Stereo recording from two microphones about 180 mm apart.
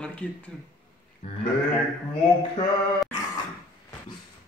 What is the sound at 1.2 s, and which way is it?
Sheep, 30° left (ahead or behind).